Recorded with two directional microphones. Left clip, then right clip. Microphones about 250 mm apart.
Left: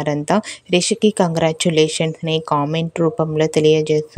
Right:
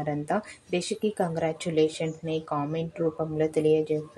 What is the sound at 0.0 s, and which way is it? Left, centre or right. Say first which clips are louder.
A woman's voice: left 10 dB; left.